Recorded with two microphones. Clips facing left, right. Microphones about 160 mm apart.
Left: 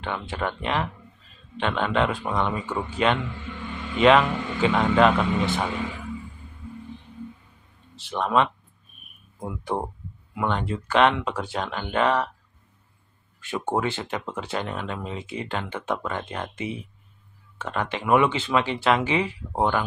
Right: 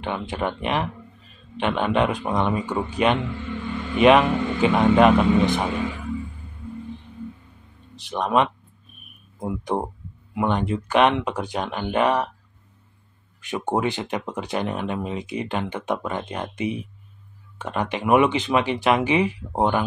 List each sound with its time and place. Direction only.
0.0 s speech: 15° right (ahead or behind)
7.9 s speech: 15° right (ahead or behind)
13.4 s speech: 15° right (ahead or behind)